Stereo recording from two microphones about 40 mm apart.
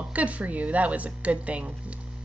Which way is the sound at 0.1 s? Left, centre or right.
Right.